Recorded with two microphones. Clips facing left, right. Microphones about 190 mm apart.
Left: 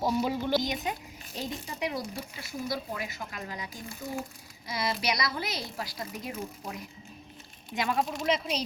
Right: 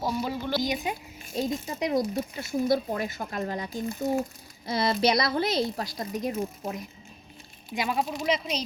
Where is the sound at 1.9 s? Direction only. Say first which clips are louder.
Right 9 dB; 45° right (ahead or behind).